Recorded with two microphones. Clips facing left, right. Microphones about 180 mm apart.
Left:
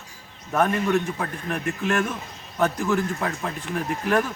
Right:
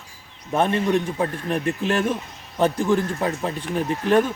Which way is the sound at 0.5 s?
25° right (ahead or behind).